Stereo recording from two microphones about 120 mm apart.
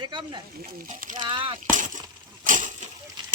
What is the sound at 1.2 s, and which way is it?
Speech, 45° right (ahead or behind).